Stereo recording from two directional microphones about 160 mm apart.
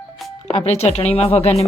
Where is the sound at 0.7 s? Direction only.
40° left (ahead or behind).